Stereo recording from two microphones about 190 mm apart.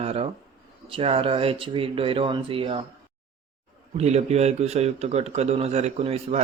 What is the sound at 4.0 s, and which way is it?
A man's voice, 35° right (ahead or behind).